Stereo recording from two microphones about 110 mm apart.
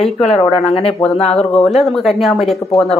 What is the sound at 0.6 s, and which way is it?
Speech, 65° left (ahead or behind).